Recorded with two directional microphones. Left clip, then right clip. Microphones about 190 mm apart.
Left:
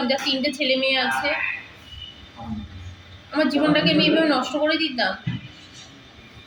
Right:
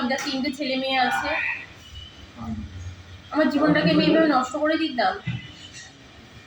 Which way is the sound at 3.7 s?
15° left (ahead or behind).